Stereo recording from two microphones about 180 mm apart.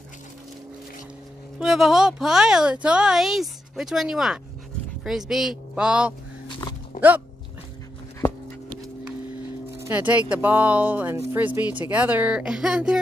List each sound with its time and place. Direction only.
1.6 s speech: centre (ahead or behind)
6.4 s dog: 25° left (ahead or behind)
6.9 s a sound: 45° left (ahead or behind)
9.8 s speech: 10° right (ahead or behind)